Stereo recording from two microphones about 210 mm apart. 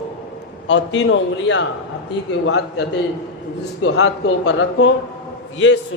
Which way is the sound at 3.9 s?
70° left (ahead or behind).